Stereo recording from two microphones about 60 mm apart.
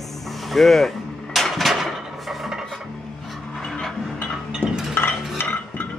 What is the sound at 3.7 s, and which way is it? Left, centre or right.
Music, centre.